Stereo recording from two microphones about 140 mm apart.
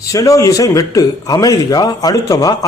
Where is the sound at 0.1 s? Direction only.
25° left (ahead or behind).